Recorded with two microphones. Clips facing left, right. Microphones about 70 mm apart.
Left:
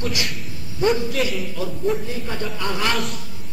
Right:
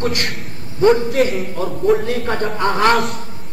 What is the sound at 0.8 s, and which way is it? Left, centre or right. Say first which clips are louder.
Speech: right 7 dB; right.